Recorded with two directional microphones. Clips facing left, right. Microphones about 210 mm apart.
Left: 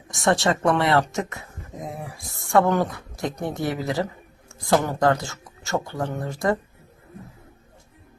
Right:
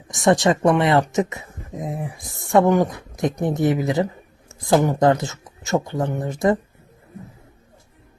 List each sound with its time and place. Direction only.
0.1 s speech: 20° right (ahead or behind)